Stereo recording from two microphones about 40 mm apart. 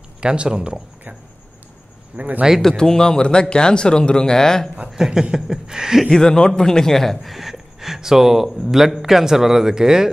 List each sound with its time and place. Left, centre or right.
0.2 s speech: right
2.1 s speech: right
2.8 s speech: centre
4.8 s chuckle: centre
6.0 s speech: centre